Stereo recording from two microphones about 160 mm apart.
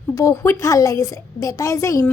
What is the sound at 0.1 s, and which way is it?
A woman's voice, 20° left (ahead or behind).